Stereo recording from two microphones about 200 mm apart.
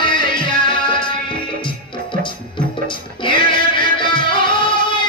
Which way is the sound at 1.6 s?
25° left (ahead or behind).